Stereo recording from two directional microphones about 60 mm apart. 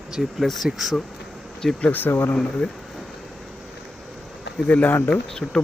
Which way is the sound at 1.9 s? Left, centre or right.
Left.